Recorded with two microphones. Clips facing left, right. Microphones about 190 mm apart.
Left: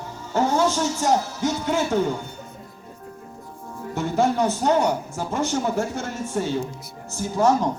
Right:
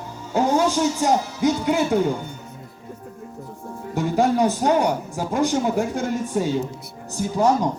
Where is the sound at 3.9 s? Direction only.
15° right (ahead or behind).